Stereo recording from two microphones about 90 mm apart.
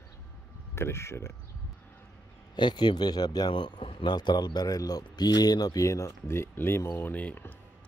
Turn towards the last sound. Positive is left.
turn(degrees=15)  # may be behind; listen again after turning